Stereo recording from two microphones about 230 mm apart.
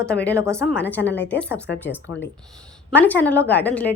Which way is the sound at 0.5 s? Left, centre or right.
Centre.